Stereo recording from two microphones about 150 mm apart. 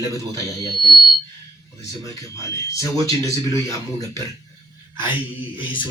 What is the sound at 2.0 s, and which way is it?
Speech, 20° left (ahead or behind).